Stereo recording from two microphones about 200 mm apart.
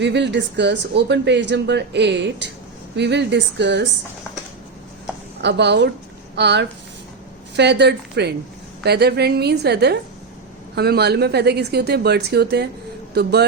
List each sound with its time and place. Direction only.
0.0 s speech: 60° right (ahead or behind)
5.4 s a woman's voice: 60° right (ahead or behind)